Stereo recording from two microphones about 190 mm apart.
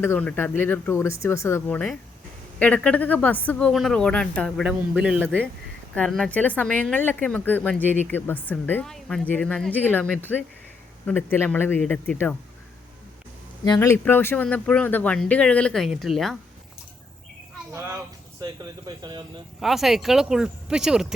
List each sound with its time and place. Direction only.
0.0 s speech: 10° left (ahead or behind); by 5.5 s 10° right (ahead or behind)
5.9 s speech: 5° left (ahead or behind)
13.7 s speech: 15° left (ahead or behind)
17.7 s speech: 15° right (ahead or behind)
19.5 s speech: centre (ahead or behind)